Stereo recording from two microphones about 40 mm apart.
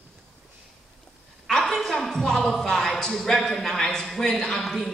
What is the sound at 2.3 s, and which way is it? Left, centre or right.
Speech, centre.